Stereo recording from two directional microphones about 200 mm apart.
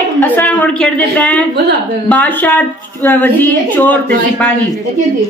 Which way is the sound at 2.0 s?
5° left (ahead or behind).